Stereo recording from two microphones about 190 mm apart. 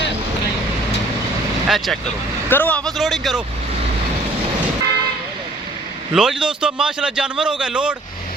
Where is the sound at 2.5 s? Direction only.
10° left (ahead or behind).